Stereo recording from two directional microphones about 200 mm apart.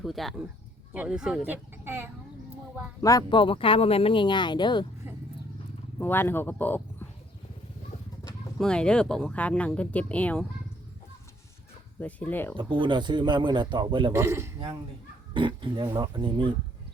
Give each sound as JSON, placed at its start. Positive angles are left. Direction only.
{"t": 0.0, "sound": "speech", "side_deg": 0}
{"t": 3.0, "sound": "speech", "side_deg": 15}
{"t": 6.0, "sound": "speech", "side_deg": 10}
{"t": 7.9, "sound": "chicken", "side_deg": 40}
{"t": 8.5, "sound": "speech", "side_deg": 5}
{"t": 11.9, "sound": "speech", "side_deg": 10}
{"t": 12.5, "sound": "speech", "side_deg": -25}
{"t": 14.1, "sound": "speech", "side_deg": -15}
{"t": 15.3, "sound": "speech", "side_deg": -25}